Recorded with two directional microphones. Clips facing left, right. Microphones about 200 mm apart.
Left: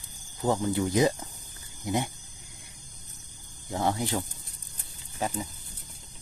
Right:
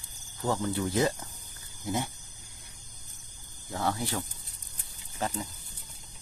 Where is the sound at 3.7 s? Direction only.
20° left (ahead or behind).